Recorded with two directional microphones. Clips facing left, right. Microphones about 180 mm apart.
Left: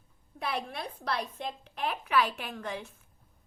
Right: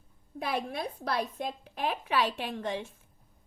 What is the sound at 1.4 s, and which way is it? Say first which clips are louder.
A woman's voice: right 2 dB; 40° right (ahead or behind).